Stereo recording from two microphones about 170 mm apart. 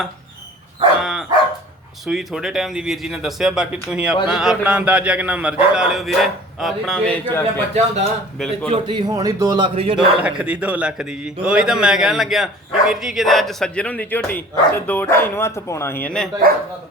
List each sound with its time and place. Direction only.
1.0 s dog: 5° right (ahead or behind)
2.0 s a man's voice: 5° right (ahead or behind)
7.7 s speech: 40° right (ahead or behind)
8.4 s a man's voice: centre (ahead or behind)
8.7 s a man's voice: 30° right (ahead or behind)
10.2 s a man's voice: 5° right (ahead or behind)